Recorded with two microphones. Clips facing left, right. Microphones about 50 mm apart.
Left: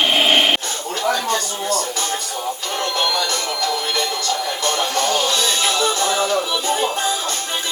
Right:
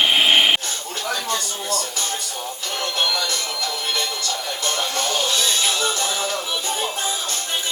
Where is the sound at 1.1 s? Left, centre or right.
Left.